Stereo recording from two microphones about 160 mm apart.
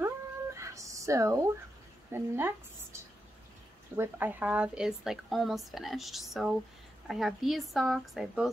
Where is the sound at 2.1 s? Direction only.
15° right (ahead or behind).